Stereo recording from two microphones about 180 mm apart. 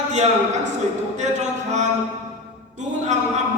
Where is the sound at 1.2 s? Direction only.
40° right (ahead or behind).